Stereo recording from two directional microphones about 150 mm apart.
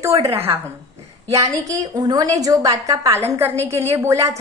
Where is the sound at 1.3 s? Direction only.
20° right (ahead or behind).